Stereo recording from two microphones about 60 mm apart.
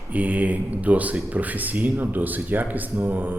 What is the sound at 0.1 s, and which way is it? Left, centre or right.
A man's voice, right.